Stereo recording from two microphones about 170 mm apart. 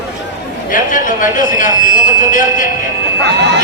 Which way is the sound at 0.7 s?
50° left (ahead or behind).